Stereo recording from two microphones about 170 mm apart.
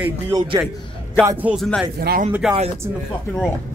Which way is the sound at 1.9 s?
60° right (ahead or behind).